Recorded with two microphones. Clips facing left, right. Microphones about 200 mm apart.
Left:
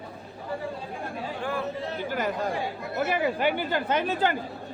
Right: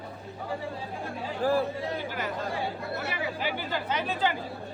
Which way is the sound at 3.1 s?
55° left (ahead or behind).